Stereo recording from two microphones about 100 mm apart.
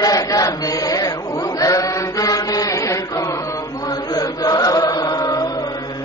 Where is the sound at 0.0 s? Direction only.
35° left (ahead or behind).